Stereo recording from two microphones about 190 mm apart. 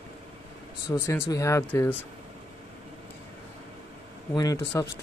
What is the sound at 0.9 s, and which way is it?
Speech, 15° left (ahead or behind).